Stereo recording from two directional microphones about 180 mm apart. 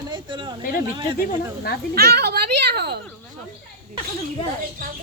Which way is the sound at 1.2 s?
60° left (ahead or behind).